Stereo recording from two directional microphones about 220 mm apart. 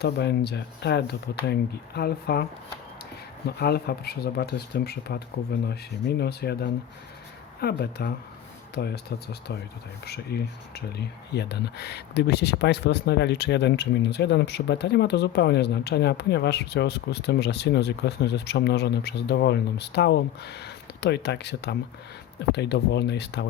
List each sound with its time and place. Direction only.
0.0 s speech: 50° left (ahead or behind)
3.6 s speech: 45° left (ahead or behind)